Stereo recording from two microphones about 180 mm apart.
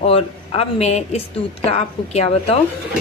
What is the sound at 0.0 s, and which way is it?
A woman's voice, 35° left (ahead or behind).